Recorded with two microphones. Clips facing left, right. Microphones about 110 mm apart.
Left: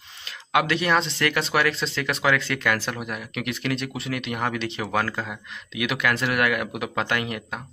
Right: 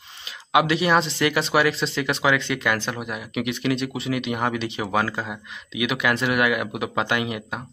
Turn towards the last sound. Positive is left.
turn(degrees=-5)  # may be behind; listen again after turning